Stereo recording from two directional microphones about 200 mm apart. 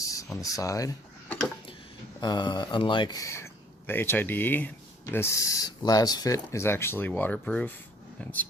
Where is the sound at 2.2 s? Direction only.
20° left (ahead or behind).